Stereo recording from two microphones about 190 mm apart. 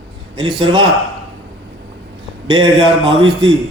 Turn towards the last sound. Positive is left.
turn(degrees=-25)  # may be behind; listen again after turning